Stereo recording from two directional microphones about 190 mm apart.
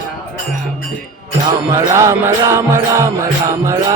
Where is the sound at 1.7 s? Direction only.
15° right (ahead or behind).